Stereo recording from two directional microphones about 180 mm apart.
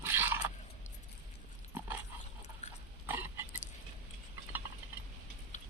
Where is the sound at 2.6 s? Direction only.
40° left (ahead or behind).